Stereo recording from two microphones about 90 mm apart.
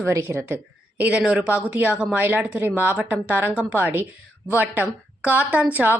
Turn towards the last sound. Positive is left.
turn(degrees=-20)  # may be behind; listen again after turning